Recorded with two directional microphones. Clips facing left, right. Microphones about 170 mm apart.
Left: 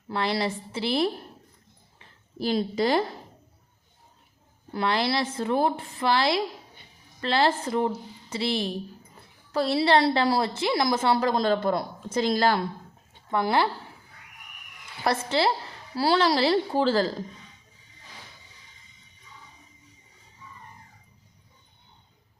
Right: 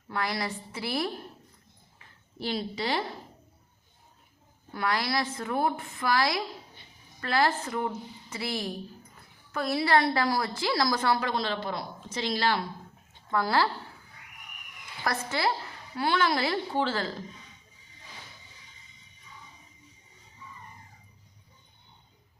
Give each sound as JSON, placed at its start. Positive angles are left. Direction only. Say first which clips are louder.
{"t": 0.1, "sound": "a woman's voice", "louder": "left 5 dB", "side_deg": 30}
{"t": 2.0, "sound": "a sound", "louder": "left 6 dB", "side_deg": 40}
{"t": 4.7, "sound": "a woman's voice", "louder": "left 4 dB", "side_deg": 25}
{"t": 11.3, "sound": "speech", "louder": "left 7 dB", "side_deg": 45}
{"t": 13.3, "sound": "a woman's voice", "louder": "left 2 dB", "side_deg": 20}
{"t": 15.0, "sound": "a woman's voice", "louder": "left 5 dB", "side_deg": 30}